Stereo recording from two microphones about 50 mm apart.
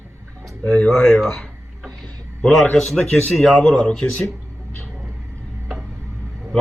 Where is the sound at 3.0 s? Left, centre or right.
Left.